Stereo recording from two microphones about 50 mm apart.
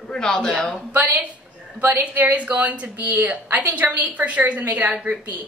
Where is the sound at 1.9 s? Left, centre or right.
Right.